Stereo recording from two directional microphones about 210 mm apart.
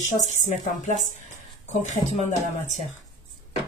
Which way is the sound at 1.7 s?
35° left (ahead or behind).